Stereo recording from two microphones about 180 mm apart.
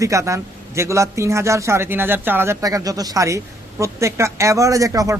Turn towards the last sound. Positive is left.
turn(degrees=-20)  # may be behind; listen again after turning